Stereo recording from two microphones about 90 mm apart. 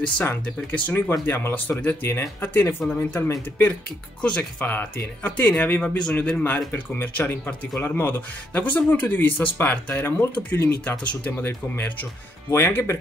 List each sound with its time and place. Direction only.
0.2 s speech: 20° left (ahead or behind)